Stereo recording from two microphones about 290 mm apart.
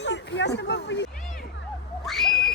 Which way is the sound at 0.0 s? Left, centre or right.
Left.